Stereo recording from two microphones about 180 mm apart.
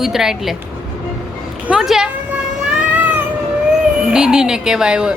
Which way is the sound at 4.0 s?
5° right (ahead or behind).